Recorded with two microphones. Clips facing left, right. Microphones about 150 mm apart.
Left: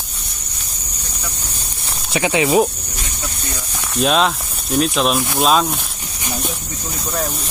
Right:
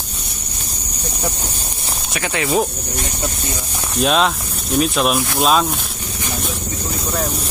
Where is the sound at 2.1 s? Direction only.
20° left (ahead or behind).